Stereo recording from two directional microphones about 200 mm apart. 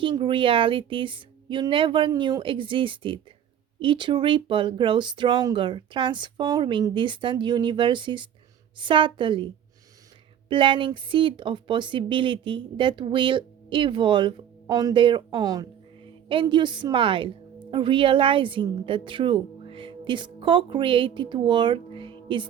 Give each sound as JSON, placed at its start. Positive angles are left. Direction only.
{"t": 0.0, "sound": "speech", "side_deg": -25}
{"t": 10.5, "sound": "a woman's voice", "side_deg": -25}